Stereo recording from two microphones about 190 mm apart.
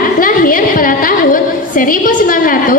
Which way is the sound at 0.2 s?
45° left (ahead or behind).